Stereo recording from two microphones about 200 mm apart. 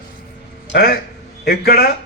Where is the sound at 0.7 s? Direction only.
50° left (ahead or behind).